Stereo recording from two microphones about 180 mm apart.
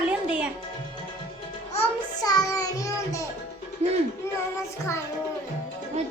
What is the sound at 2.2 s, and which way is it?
Child singing, 20° left (ahead or behind).